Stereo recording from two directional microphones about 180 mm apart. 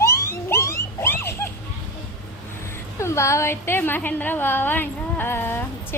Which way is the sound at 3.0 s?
15° left (ahead or behind).